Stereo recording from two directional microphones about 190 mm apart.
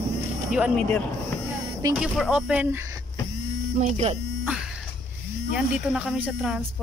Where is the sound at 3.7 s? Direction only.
40° right (ahead or behind).